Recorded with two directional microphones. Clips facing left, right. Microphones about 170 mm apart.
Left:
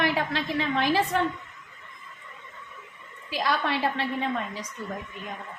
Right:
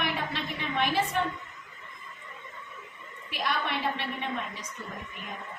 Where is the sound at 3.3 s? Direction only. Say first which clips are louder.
Left 4 dB; 90° left.